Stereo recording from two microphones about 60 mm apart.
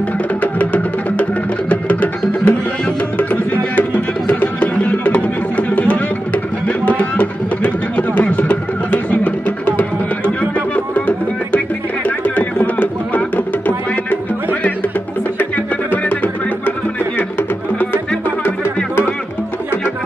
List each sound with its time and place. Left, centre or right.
0.4 s music: left
15.3 s music: left